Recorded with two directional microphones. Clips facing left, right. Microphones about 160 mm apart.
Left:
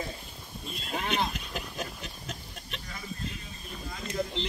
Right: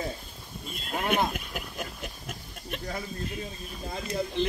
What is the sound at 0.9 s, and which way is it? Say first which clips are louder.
Speech: right 4 dB; 50° right (ahead or behind).